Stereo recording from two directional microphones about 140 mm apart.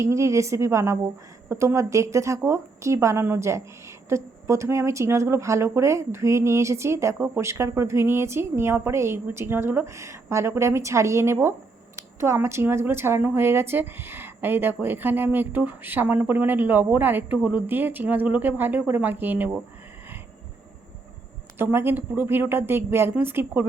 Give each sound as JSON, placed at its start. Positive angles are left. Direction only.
{"t": 0.0, "sound": "a woman's voice", "side_deg": -20}
{"t": 21.6, "sound": "a woman's voice", "side_deg": -15}